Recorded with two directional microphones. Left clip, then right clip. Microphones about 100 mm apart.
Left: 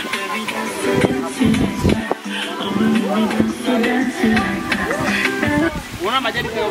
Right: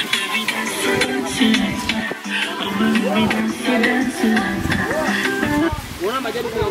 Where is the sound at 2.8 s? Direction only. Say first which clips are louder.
Even; 35° right (ahead or behind).